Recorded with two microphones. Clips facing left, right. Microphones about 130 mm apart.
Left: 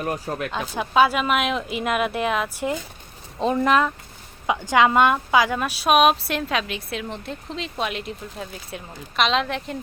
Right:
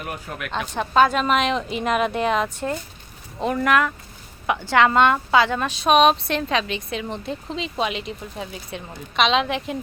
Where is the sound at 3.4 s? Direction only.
20° left (ahead or behind).